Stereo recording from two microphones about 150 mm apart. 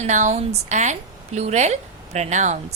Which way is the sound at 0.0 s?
50° right (ahead or behind).